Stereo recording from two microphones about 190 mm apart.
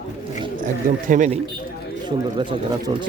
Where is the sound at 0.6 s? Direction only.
45° right (ahead or behind).